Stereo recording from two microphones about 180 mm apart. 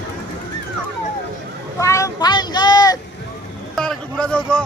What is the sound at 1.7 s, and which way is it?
Vehicle, 15° left (ahead or behind).